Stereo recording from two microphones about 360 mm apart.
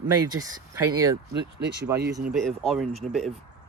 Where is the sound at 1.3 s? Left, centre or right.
Right.